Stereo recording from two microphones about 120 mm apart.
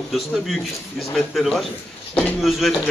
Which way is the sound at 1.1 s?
Centre (ahead or behind).